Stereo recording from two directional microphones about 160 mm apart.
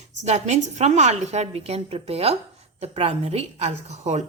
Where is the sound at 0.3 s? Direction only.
45° right (ahead or behind).